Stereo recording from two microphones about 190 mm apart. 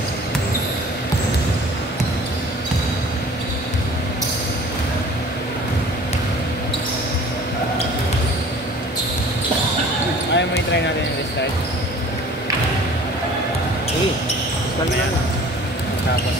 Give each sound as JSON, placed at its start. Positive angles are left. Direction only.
{"t": 10.3, "sound": "basketball bounce", "side_deg": 65}